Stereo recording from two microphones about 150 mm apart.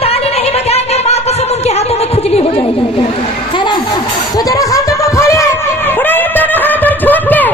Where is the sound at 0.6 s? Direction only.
45° left (ahead or behind).